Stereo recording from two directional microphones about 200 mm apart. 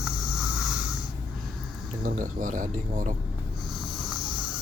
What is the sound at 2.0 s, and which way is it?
Speech, 40° right (ahead or behind).